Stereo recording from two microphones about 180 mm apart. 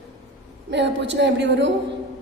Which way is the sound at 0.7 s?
75° right (ahead or behind).